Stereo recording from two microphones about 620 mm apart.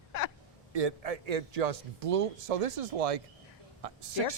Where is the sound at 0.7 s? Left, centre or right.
Right.